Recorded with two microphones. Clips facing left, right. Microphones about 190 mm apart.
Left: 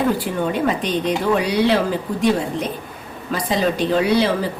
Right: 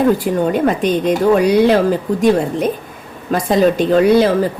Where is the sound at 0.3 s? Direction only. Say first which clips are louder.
Right 5 dB; 50° right (ahead or behind).